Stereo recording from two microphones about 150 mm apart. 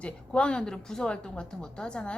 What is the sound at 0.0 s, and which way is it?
A woman's voice, 5° left (ahead or behind).